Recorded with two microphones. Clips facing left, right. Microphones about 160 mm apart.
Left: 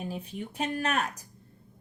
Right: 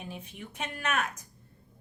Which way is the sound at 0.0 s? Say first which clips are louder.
Left 6 dB; 35° left (ahead or behind).